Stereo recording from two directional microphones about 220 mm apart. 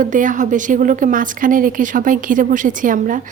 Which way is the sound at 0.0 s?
35° right (ahead or behind).